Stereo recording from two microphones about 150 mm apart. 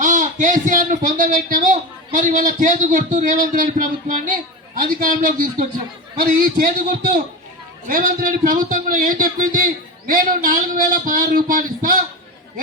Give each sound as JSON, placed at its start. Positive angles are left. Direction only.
{"t": 0.0, "sound": "a man's voice", "side_deg": -55}